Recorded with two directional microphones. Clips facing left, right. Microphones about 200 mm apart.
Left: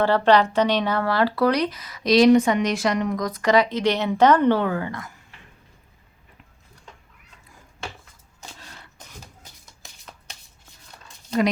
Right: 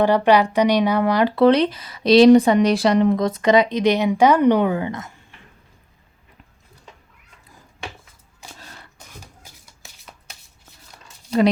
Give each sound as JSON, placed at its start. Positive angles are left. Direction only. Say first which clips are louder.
{"t": 0.0, "sound": "speech", "louder": "right 2 dB", "side_deg": -15}
{"t": 9.2, "sound": "shuffling cards", "louder": "right 1 dB", "side_deg": -10}